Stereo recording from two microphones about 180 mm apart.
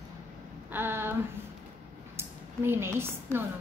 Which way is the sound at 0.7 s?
10° right (ahead or behind).